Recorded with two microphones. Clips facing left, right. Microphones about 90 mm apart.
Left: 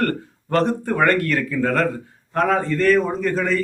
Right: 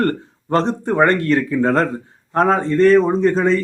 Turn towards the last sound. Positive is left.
turn(degrees=-30)  # may be behind; listen again after turning